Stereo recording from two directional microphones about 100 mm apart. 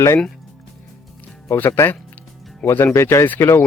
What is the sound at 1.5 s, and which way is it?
A man's voice, 25° left (ahead or behind).